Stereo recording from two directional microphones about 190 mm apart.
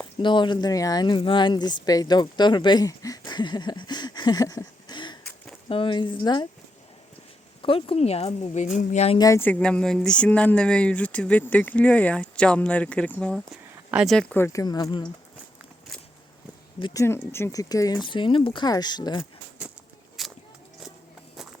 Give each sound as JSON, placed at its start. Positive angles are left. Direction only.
{"t": 0.2, "sound": "speech", "side_deg": 25}
{"t": 7.6, "sound": "speech", "side_deg": 30}
{"t": 9.1, "sound": "speech", "side_deg": 15}
{"t": 16.8, "sound": "speech", "side_deg": 15}
{"t": 20.2, "sound": "a sound", "side_deg": 0}